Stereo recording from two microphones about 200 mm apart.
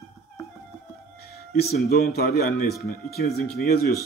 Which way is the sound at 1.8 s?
50° left (ahead or behind).